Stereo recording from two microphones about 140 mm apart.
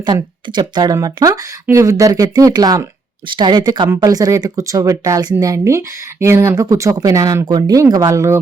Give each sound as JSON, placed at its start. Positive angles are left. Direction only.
{"t": 0.0, "sound": "speech", "side_deg": -30}